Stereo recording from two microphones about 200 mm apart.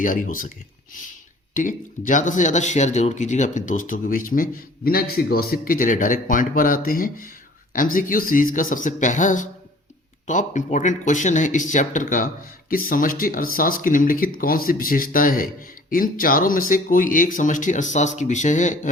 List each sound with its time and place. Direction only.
0.0 s speech: 40° left (ahead or behind)
1.5 s speech: 40° left (ahead or behind)